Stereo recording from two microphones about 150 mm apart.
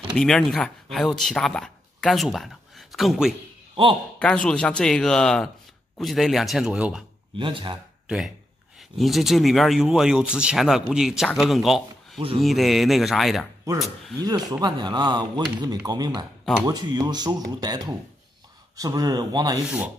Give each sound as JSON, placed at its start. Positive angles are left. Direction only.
{"t": 0.1, "sound": "speech", "side_deg": 5}
{"t": 7.3, "sound": "speech", "side_deg": -35}
{"t": 8.1, "sound": "speech", "side_deg": -5}
{"t": 14.2, "sound": "speech", "side_deg": -25}